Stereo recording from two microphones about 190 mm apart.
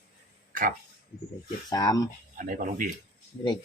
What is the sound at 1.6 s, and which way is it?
Speech, 20° left (ahead or behind).